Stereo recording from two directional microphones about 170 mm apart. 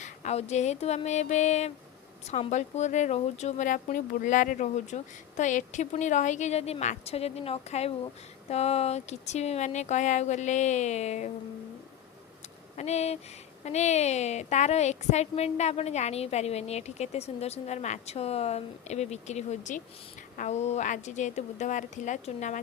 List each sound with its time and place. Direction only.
0.0 s a woman's voice: 45° left (ahead or behind)
12.7 s a woman's voice: 40° left (ahead or behind)